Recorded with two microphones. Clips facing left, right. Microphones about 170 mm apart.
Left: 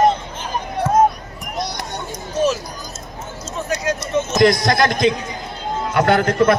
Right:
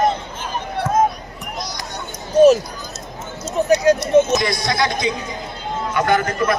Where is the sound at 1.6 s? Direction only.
60° left (ahead or behind).